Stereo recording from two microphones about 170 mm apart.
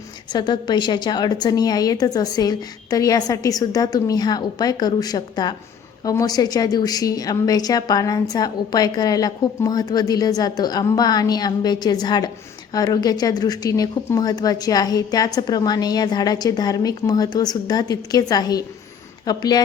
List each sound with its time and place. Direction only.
0.3 s a woman's voice: 25° left (ahead or behind)